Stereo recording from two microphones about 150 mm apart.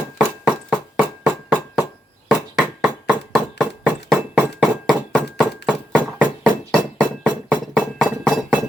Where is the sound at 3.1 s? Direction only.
5° right (ahead or behind).